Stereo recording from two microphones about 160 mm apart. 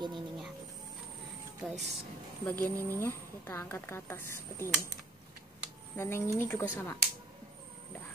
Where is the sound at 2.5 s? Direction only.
10° left (ahead or behind).